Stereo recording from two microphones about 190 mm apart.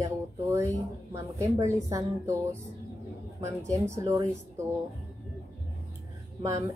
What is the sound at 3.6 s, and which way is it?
Speech, 15° right (ahead or behind).